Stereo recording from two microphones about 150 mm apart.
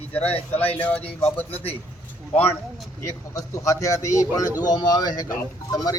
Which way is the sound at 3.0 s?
20° left (ahead or behind).